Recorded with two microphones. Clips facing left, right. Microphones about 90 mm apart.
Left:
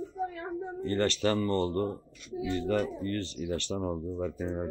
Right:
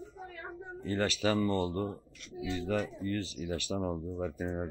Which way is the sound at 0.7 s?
5° right (ahead or behind).